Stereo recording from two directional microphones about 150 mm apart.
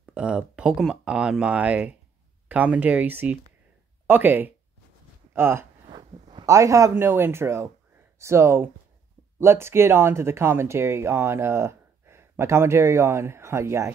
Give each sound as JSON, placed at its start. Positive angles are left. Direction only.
{"t": 0.0, "sound": "speech", "side_deg": -5}
{"t": 5.9, "sound": "speech", "side_deg": -30}